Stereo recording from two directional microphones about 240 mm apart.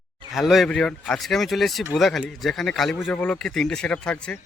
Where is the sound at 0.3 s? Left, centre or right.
Centre.